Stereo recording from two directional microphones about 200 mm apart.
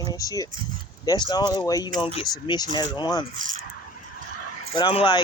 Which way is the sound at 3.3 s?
40° right (ahead or behind).